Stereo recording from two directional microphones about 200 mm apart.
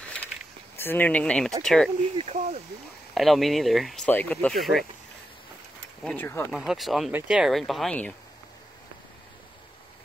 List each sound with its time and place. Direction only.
0.7 s speech: 10° left (ahead or behind)
2.1 s speech: 35° right (ahead or behind)
3.2 s speech: centre (ahead or behind)
6.0 s speech: 10° left (ahead or behind)
6.5 s speech: centre (ahead or behind)